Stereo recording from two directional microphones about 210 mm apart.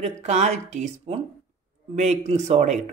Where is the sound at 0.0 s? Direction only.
30° right (ahead or behind).